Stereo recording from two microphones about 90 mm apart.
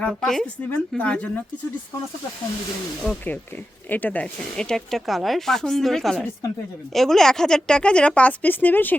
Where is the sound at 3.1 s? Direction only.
10° left (ahead or behind).